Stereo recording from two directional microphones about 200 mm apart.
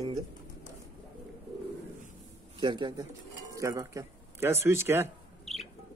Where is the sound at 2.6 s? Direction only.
20° right (ahead or behind).